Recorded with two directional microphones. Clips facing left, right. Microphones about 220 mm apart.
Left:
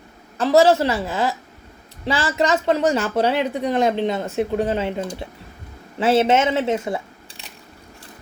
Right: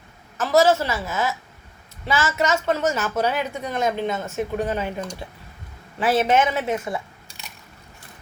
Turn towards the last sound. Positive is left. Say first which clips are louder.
# left 2 dB
turn(degrees=30)  # may be behind; listen again after turning